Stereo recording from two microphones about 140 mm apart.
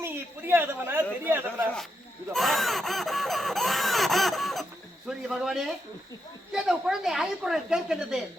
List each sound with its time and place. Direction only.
0.0 s speech: 15° right (ahead or behind)
2.3 s a sound: centre (ahead or behind)
5.0 s a woman's voice: 5° right (ahead or behind)